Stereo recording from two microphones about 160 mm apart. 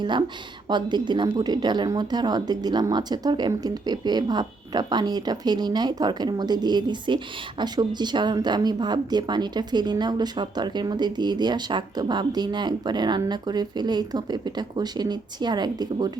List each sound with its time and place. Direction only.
0.0 s speech: 30° right (ahead or behind)